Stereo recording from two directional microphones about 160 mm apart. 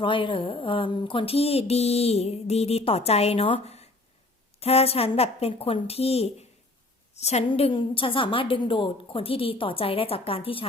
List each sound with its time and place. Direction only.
0.0 s speech: 30° left (ahead or behind)